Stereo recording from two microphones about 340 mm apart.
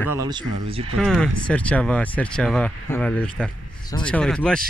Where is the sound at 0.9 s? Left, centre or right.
Centre.